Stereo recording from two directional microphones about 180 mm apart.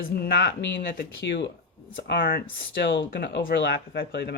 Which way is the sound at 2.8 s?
85° left.